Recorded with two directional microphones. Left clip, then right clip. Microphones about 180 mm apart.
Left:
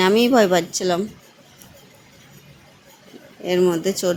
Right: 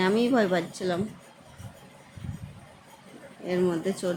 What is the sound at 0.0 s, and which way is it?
Speech, 35° left (ahead or behind).